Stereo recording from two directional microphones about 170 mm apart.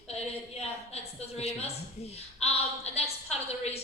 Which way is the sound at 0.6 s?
40° left (ahead or behind).